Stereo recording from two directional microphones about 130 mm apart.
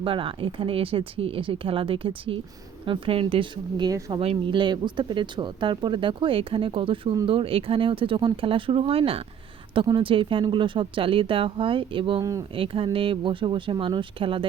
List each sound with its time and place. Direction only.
0.0 s speech: 45° right (ahead or behind)
3.8 s speech: 30° right (ahead or behind)
4.2 s speech: 45° right (ahead or behind)
12.2 s speech: 25° right (ahead or behind)
12.5 s speech: 45° right (ahead or behind)